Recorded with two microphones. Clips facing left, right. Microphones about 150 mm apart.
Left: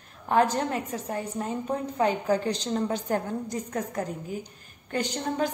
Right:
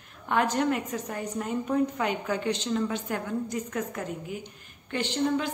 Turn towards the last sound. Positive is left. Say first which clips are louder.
# right 1 dB
turn(degrees=40)  # may be behind; listen again after turning